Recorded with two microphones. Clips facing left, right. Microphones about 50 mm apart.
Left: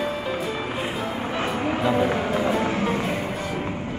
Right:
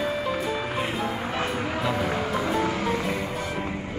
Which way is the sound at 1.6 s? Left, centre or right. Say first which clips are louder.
Left 5 dB; left.